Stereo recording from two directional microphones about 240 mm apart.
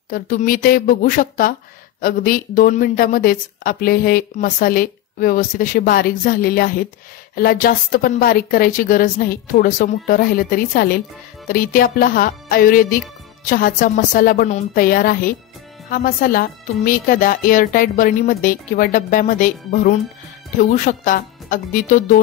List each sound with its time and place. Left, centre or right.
0.1 s speech: left